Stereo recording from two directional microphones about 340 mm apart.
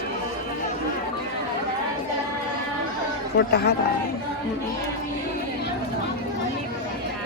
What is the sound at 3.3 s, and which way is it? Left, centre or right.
Speech, left.